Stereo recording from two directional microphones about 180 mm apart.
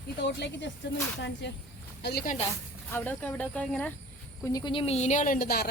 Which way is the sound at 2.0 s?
60° left (ahead or behind).